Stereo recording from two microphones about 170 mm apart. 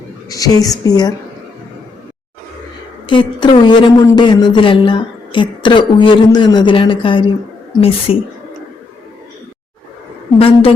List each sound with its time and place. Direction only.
0.3 s speech: 20° left (ahead or behind)
3.1 s a woman's voice: 30° left (ahead or behind)
10.3 s a woman's voice: 35° left (ahead or behind)